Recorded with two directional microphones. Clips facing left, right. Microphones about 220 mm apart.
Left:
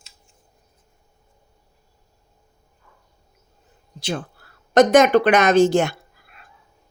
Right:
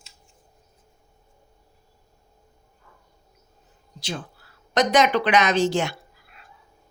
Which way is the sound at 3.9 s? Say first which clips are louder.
Left 5 dB; 55° left (ahead or behind).